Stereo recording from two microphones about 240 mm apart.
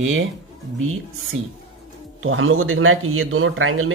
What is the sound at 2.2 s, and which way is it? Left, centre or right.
A man's voice, right.